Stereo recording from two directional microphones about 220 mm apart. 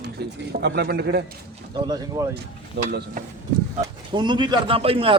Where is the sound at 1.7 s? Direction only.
20° right (ahead or behind).